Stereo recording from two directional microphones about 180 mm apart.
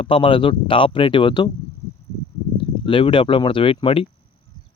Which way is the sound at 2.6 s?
30° left (ahead or behind).